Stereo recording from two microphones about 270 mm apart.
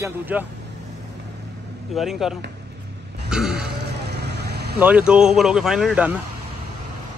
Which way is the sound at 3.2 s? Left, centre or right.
Centre.